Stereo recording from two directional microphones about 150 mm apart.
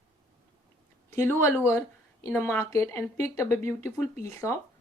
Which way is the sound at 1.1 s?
20° left (ahead or behind).